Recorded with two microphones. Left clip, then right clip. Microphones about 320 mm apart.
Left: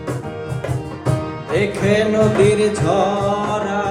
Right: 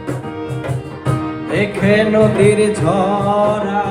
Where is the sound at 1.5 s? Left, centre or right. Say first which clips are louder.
Right 2 dB; right.